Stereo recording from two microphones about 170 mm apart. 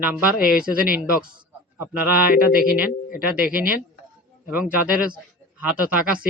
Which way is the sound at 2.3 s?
60° left (ahead or behind).